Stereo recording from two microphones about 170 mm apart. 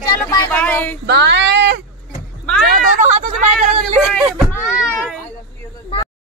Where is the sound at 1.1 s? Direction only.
85° right.